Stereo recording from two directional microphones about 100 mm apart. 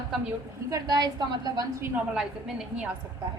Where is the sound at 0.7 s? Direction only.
40° right (ahead or behind).